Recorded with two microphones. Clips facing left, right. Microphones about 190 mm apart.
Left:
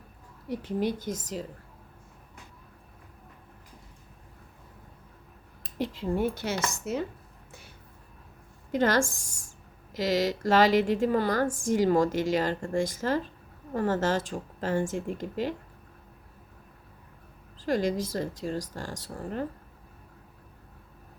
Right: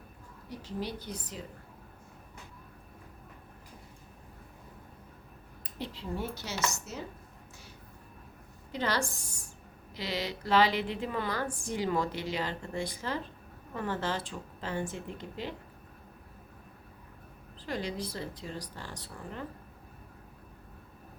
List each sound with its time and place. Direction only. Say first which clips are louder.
0.4 s a woman's voice: left 9 dB; 55° left (ahead or behind)
5.8 s a woman's voice: left 9 dB; 50° left (ahead or behind)
8.7 s a woman's voice: left 7 dB; 45° left (ahead or behind)
17.7 s a woman's voice: left 8 dB; 45° left (ahead or behind)